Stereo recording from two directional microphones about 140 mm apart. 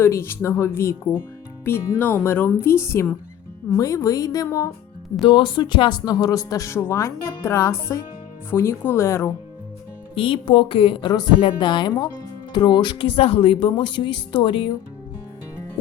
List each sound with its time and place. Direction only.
0.0 s speech: 15° left (ahead or behind)
5.2 s speech: 35° left (ahead or behind); by 9.3 s 20° left (ahead or behind)
10.2 s speech: 40° left (ahead or behind)